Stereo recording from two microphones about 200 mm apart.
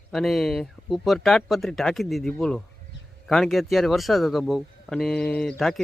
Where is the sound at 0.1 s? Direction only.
Centre (ahead or behind).